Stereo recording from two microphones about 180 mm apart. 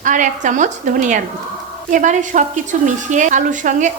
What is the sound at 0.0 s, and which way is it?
Speech, 45° right (ahead or behind).